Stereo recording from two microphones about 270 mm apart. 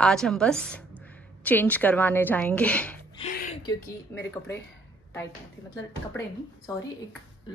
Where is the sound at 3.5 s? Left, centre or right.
Centre.